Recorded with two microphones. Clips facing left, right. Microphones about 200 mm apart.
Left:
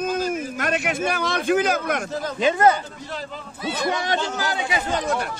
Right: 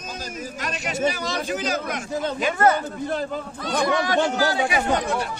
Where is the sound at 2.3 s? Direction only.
20° left (ahead or behind).